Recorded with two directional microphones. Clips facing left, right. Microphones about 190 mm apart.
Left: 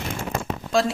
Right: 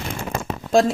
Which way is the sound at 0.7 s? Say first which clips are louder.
Right 5 dB; 45° right (ahead or behind).